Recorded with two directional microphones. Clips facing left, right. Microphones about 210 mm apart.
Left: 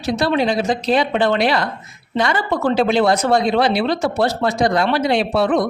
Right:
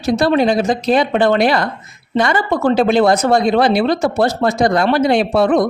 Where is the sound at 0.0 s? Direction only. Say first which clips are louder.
Right 4 dB; 45° right (ahead or behind).